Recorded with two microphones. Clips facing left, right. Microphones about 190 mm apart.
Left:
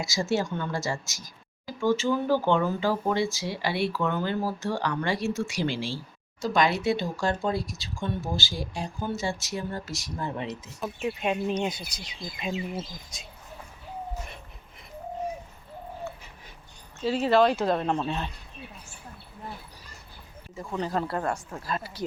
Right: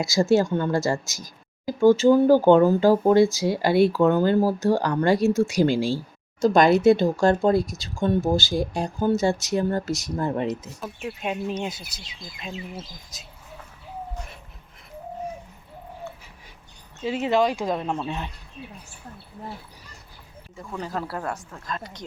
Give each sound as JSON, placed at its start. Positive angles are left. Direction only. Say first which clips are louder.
{"t": 0.1, "sound": "speech", "louder": "right 9 dB", "side_deg": -35}
{"t": 11.0, "sound": "speech", "louder": "left 1 dB", "side_deg": 0}
{"t": 17.0, "sound": "speech", "louder": "even", "side_deg": -20}
{"t": 20.6, "sound": "speech", "louder": "left 2 dB", "side_deg": 0}